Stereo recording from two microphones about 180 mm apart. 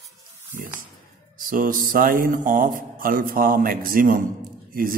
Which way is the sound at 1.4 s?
50° right (ahead or behind).